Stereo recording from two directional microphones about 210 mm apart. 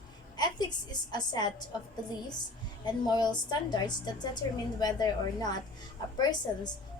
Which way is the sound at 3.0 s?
20° left (ahead or behind).